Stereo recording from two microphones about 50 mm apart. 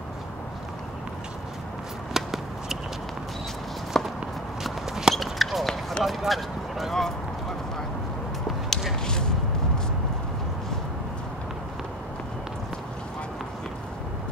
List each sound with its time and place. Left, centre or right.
2.1 s a sound: centre
3.9 s walk: centre
4.6 s walk: centre
5.1 s basketball bounce: centre
6.0 s speech: centre